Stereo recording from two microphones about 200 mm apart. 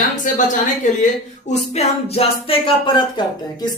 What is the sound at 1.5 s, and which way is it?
Speech, 35° left (ahead or behind).